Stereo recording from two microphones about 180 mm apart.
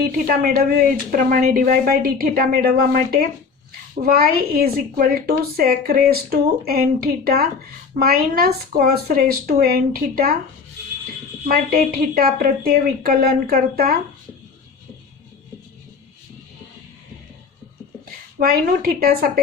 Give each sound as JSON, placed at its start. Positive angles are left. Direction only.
{"t": 0.3, "sound": "speech", "side_deg": -55}
{"t": 11.4, "sound": "speech", "side_deg": -55}
{"t": 18.3, "sound": "speech", "side_deg": -55}